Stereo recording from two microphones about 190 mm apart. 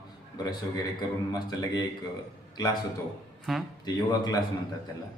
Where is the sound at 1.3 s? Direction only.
20° left (ahead or behind).